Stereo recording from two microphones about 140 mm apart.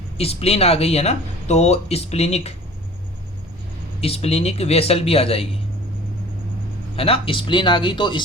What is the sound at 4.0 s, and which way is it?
Speech, 45° left (ahead or behind).